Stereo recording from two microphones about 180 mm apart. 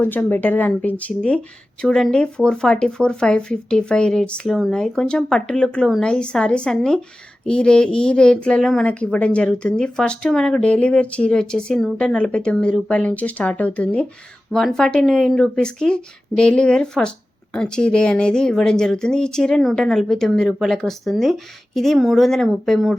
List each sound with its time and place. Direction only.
0.0 s speech: 10° left (ahead or behind)